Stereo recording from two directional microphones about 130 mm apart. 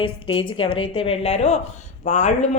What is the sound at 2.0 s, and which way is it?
Speech, 65° left (ahead or behind).